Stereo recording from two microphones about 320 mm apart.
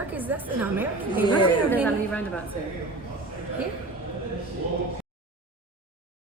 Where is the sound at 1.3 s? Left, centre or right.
Centre.